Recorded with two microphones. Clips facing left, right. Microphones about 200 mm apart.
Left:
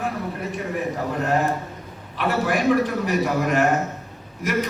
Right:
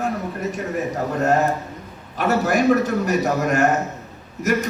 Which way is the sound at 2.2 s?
45° right (ahead or behind).